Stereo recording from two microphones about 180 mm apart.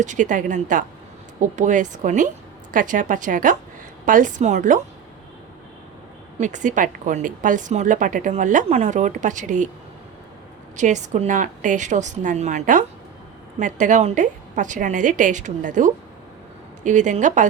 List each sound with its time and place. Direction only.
0.0 s a woman's voice: 45° right (ahead or behind)
6.4 s a woman's voice: 45° right (ahead or behind)
10.8 s a woman's voice: 40° right (ahead or behind)